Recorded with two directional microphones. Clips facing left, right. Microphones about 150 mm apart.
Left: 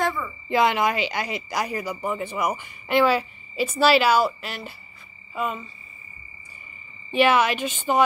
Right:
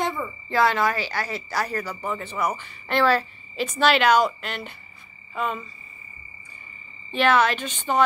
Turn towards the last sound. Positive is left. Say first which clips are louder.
# left 2 dB
turn(degrees=10)  # may be behind; listen again after turning